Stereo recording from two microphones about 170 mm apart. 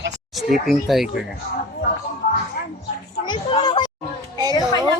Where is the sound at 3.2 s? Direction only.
25° left (ahead or behind).